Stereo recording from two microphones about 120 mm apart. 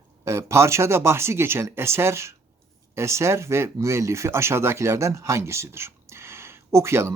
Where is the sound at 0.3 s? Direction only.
20° right (ahead or behind).